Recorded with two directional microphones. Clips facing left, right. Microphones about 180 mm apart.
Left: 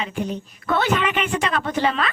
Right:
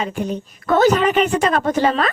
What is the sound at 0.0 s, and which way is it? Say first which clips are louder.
A child's voice: right 3 dB; 45° right (ahead or behind).